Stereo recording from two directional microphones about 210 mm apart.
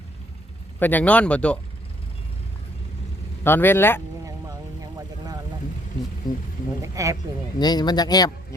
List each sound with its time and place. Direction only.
0.8 s speech: 10° left (ahead or behind)
3.4 s speech: 10° left (ahead or behind)
4.8 s vehicle: 15° right (ahead or behind)
6.3 s speech: 20° left (ahead or behind)
6.8 s speech: 15° right (ahead or behind)
7.6 s speech: 20° left (ahead or behind)